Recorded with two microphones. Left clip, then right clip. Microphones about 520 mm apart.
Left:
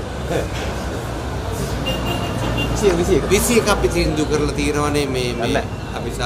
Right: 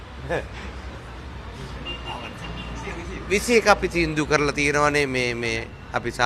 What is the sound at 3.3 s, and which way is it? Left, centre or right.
Speech, right.